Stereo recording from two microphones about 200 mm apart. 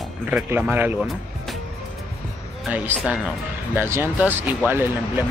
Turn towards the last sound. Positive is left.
turn(degrees=-10)  # may be behind; listen again after turning